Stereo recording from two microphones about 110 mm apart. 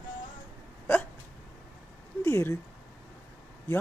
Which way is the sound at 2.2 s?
25° left (ahead or behind).